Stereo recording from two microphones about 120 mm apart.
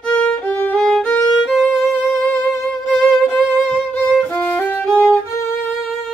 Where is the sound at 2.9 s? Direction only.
5° left (ahead or behind).